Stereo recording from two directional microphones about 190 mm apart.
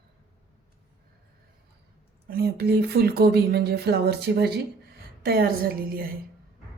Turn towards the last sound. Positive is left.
turn(degrees=-50)  # may be behind; listen again after turning